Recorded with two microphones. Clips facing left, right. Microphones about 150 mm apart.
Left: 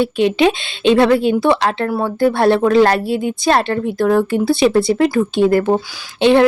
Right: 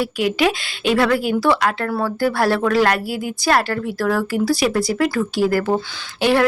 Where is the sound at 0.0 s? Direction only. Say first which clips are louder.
Left 5 dB; 25° left (ahead or behind).